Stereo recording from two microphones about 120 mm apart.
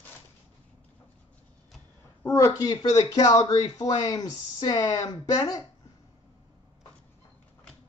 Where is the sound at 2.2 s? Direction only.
25° left (ahead or behind).